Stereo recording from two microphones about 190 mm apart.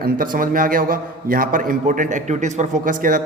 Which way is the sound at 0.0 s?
45° right (ahead or behind).